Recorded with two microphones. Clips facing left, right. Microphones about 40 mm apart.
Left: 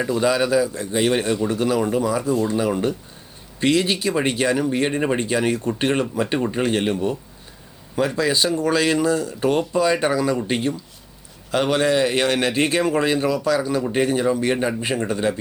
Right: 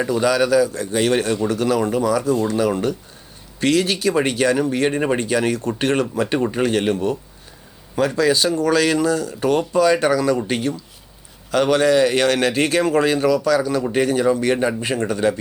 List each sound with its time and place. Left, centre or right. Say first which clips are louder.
0.2 s speech: right 3 dB; centre
2.0 s speech: right 2 dB; left
4.9 s speech: right 2 dB; centre
5.3 s speech: right 1 dB; centre
9.4 s speech: right 4 dB; centre
14.6 s speech: right 2 dB; centre
14.8 s speech: right 2 dB; centre